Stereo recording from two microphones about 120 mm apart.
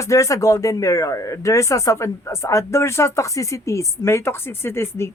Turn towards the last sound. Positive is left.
turn(degrees=20)  # may be behind; listen again after turning